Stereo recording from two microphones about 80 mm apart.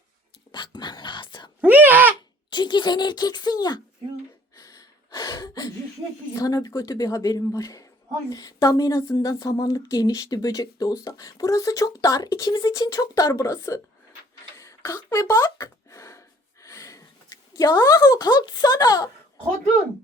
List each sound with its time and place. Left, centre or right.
0.5 s speech: left
1.6 s a sound: right
2.5 s speech: left
4.5 s gasp: left
6.3 s speech: left
14.8 s a sound: left